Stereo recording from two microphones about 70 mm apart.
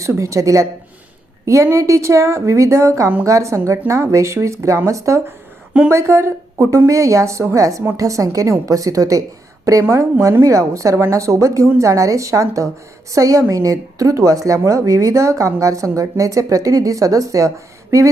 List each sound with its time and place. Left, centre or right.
0.0 s a woman's voice: right